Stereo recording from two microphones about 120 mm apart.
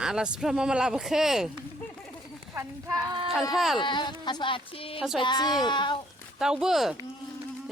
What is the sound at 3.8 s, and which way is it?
Speech, 40° left (ahead or behind).